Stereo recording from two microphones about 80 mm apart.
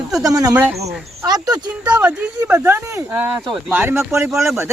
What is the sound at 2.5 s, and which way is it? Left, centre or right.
Speech, right.